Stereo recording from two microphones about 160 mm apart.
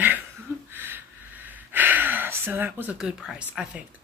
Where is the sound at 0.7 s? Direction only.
15° right (ahead or behind).